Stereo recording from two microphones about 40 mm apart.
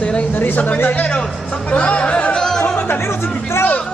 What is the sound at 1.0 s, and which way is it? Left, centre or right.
A man's voice, left.